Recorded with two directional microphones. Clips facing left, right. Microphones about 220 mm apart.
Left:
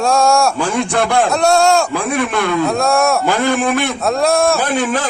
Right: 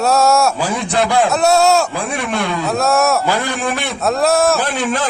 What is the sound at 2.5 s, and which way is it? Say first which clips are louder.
A man's voice: left 1 dB; centre (ahead or behind).